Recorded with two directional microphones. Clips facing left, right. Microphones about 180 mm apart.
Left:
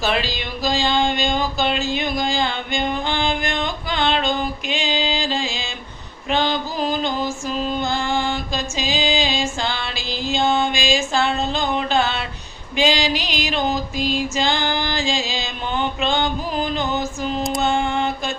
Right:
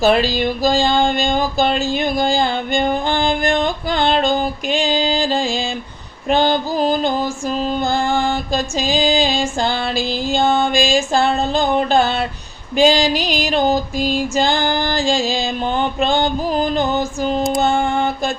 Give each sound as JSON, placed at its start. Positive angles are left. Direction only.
{"t": 0.0, "sound": "music", "side_deg": -45}
{"t": 3.2, "sound": "a sound", "side_deg": -35}
{"t": 6.2, "sound": "music", "side_deg": -45}
{"t": 7.6, "sound": "music", "side_deg": -50}
{"t": 8.7, "sound": "music", "side_deg": -35}
{"t": 10.3, "sound": "music", "side_deg": -50}
{"t": 15.1, "sound": "music", "side_deg": -50}
{"t": 15.4, "sound": "mantra", "side_deg": -40}